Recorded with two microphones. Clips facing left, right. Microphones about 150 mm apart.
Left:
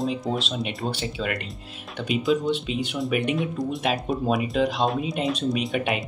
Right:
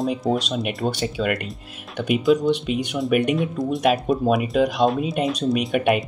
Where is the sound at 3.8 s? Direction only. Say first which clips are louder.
Right 8 dB; 50° right (ahead or behind).